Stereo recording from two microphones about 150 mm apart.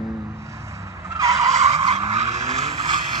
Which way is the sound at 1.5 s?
45° right (ahead or behind).